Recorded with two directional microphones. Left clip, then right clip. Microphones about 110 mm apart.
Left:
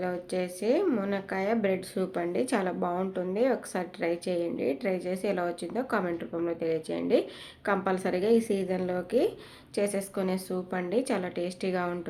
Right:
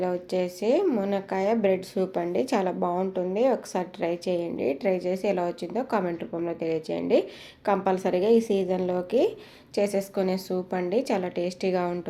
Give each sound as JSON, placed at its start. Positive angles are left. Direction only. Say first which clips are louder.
{"t": 0.0, "sound": "a woman's voice", "louder": "right 4 dB", "side_deg": -30}